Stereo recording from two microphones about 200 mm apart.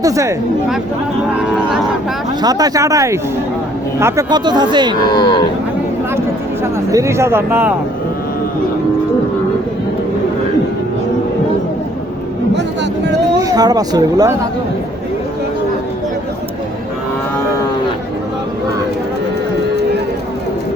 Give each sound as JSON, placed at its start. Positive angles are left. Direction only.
{"t": 0.0, "sound": "speech", "side_deg": -15}
{"t": 2.4, "sound": "speech", "side_deg": -20}
{"t": 5.0, "sound": "speech", "side_deg": 20}
{"t": 6.9, "sound": "speech", "side_deg": -15}
{"t": 13.4, "sound": "speech", "side_deg": -20}